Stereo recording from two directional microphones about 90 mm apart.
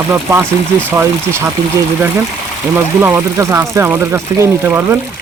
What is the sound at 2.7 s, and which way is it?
Speech, 20° right (ahead or behind).